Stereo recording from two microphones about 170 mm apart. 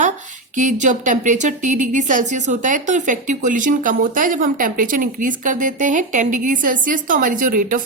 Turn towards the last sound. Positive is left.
turn(degrees=-55)  # may be behind; listen again after turning